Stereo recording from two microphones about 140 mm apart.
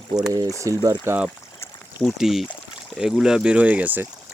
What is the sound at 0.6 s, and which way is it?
Speech, 25° right (ahead or behind).